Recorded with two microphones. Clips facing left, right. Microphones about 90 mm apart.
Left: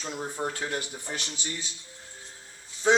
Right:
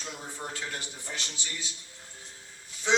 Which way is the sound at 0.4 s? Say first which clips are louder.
Left 7 dB; 30° left (ahead or behind).